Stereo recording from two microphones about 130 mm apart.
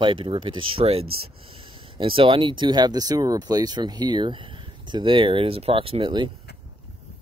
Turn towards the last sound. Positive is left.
turn(degrees=-40)  # may be behind; listen again after turning